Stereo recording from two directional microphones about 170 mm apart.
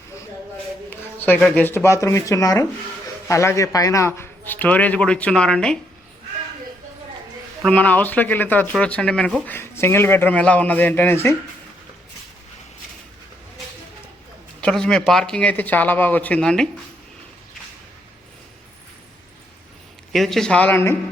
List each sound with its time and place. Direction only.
0.9 s a sound: 10° left (ahead or behind)
1.5 s speech: 10° left (ahead or behind)
7.6 s speech: 10° left (ahead or behind)
14.6 s speech: 5° left (ahead or behind)
20.1 s speech: centre (ahead or behind)